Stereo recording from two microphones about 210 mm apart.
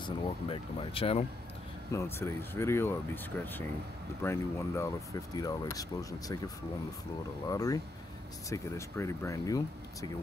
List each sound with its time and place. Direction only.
0.0 s speech: 25° left (ahead or behind)
1.9 s speech: 10° left (ahead or behind)